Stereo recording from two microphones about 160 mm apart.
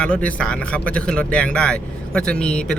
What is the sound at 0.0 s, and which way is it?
Speech, 10° left (ahead or behind).